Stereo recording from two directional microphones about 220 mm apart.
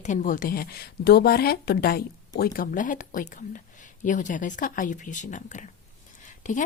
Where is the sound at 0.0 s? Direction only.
35° left (ahead or behind).